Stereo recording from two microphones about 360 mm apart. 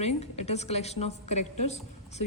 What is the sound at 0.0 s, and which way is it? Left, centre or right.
A woman's voice, centre.